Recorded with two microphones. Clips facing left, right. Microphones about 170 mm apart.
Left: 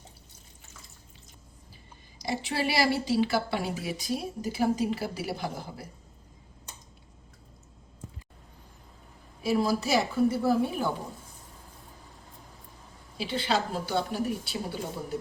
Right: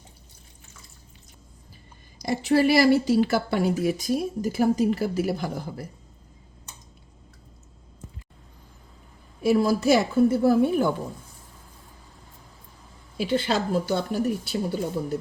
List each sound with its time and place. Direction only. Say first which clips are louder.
2.1 s a woman's voice: right 9 dB; 45° right (ahead or behind)
9.4 s a woman's voice: right 6 dB; 50° right (ahead or behind)
13.1 s a woman's voice: right 5 dB; 50° right (ahead or behind)